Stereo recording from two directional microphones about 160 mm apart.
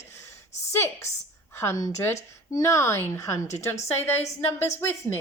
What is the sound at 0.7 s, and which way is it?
A woman's voice, 15° left (ahead or behind).